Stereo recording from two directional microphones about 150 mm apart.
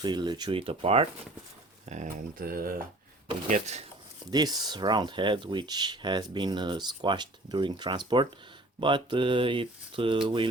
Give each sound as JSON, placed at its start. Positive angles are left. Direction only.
{"t": 0.0, "sound": "speech", "side_deg": -30}
{"t": 1.9, "sound": "speech", "side_deg": -55}
{"t": 2.4, "sound": "speech", "side_deg": -80}
{"t": 3.5, "sound": "speech", "side_deg": -45}
{"t": 4.3, "sound": "speech", "side_deg": -25}